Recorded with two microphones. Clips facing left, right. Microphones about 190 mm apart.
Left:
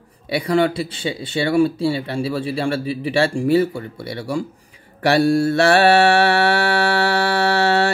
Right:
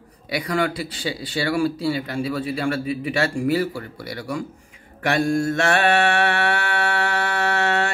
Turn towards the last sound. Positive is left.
turn(degrees=35)  # may be behind; listen again after turning